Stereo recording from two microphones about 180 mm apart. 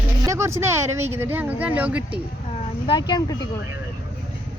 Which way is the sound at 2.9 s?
25° left (ahead or behind).